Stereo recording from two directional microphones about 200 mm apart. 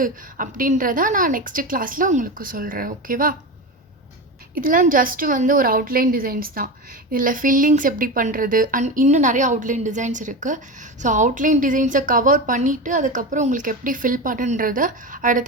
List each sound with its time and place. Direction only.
0.0 s a woman's voice: 40° right (ahead or behind)
4.5 s a woman's voice: 45° right (ahead or behind)